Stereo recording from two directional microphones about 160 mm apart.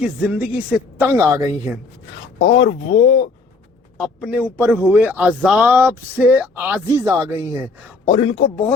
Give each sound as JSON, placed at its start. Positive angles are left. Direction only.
{"t": 0.0, "sound": "speech", "side_deg": -5}
{"t": 2.4, "sound": "speech", "side_deg": 35}
{"t": 3.9, "sound": "speech", "side_deg": -5}
{"t": 8.0, "sound": "speech", "side_deg": 35}